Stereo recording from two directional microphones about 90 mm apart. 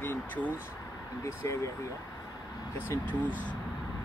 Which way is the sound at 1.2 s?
35° left (ahead or behind).